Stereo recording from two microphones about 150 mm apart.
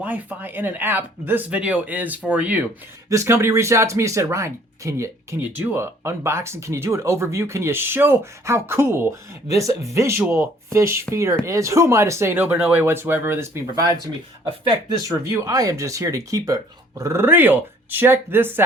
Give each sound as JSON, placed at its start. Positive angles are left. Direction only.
{"t": 0.0, "sound": "speech", "side_deg": -10}
{"t": 3.1, "sound": "speech", "side_deg": -20}
{"t": 14.8, "sound": "speech", "side_deg": -25}